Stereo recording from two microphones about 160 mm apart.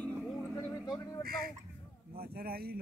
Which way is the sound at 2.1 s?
70° right (ahead or behind).